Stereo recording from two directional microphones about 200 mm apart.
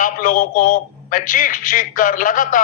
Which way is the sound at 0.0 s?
40° left (ahead or behind).